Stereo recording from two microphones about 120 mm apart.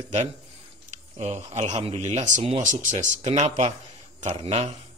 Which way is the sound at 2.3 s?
75° right (ahead or behind).